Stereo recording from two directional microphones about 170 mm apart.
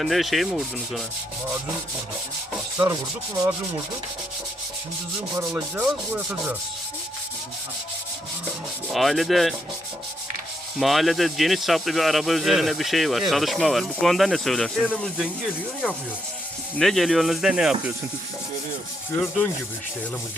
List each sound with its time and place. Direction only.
0.0 s speech: centre (ahead or behind)
2.8 s rub: 20° right (ahead or behind)
5.5 s rub: 10° right (ahead or behind)
8.9 s speech: centre (ahead or behind)
10.8 s speech: centre (ahead or behind)
16.7 s speech: centre (ahead or behind)